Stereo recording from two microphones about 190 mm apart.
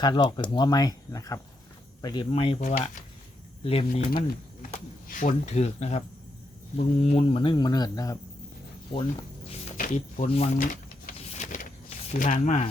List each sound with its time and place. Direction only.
0.0 s speech: 20° left (ahead or behind)
4.7 s speech: 45° left (ahead or behind); by 8.2 s 20° left (ahead or behind)
9.7 s speech: 45° left (ahead or behind)
10.2 s speech: 35° left (ahead or behind)
11.3 s vehicle: 40° left (ahead or behind)
12.1 s speech: 40° left (ahead or behind)